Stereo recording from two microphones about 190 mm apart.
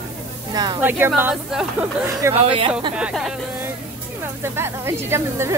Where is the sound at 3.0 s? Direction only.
5° right (ahead or behind).